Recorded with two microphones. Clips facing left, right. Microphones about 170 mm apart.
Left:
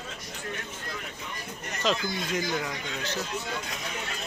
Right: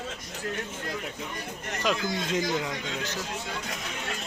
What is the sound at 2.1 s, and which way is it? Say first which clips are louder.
Speech: right 2 dB; 20° right (ahead or behind).